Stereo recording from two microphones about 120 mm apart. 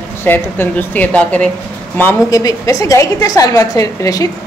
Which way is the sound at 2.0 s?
25° left (ahead or behind).